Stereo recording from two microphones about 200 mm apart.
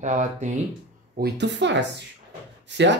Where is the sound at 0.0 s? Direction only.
35° right (ahead or behind).